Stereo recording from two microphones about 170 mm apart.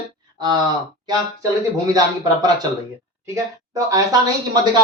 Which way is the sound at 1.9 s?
25° right (ahead or behind).